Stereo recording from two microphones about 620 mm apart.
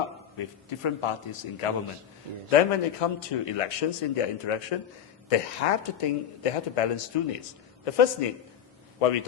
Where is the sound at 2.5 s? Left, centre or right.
Left.